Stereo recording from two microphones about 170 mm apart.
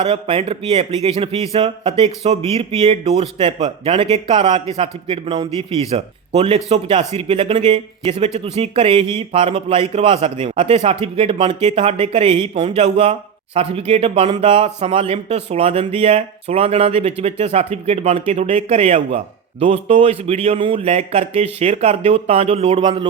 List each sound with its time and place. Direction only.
0.0 s speech: 35° right (ahead or behind)